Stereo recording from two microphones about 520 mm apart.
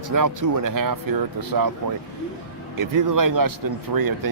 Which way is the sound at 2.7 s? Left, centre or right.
Right.